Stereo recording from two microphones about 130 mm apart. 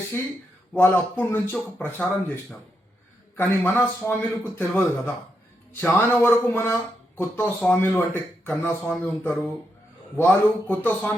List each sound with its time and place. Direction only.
0.8 s speech: 15° left (ahead or behind)